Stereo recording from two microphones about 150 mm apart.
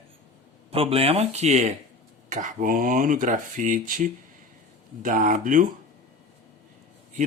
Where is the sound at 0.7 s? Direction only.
40° right (ahead or behind); by 5.6 s 60° right (ahead or behind).